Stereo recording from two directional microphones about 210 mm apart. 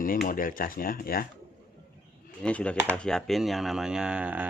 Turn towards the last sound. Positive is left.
turn(degrees=-5)  # may be behind; listen again after turning